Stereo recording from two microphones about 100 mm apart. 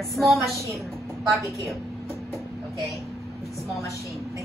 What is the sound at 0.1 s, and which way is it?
Speech, centre (ahead or behind).